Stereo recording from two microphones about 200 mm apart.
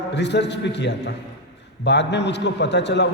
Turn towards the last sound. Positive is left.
turn(degrees=60)  # may be behind; listen again after turning